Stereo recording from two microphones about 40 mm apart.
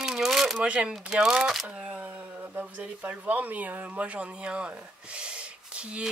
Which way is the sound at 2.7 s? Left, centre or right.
Right.